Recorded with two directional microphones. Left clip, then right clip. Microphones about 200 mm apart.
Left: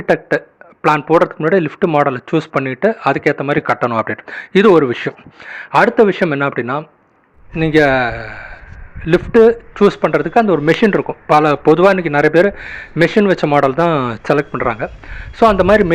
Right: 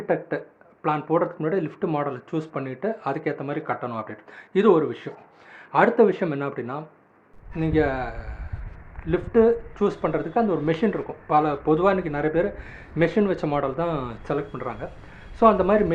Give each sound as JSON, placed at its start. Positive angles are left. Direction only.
{"t": 0.0, "sound": "a man's voice", "side_deg": 35}